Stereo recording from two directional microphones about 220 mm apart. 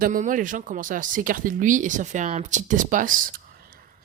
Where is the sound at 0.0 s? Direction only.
35° right (ahead or behind).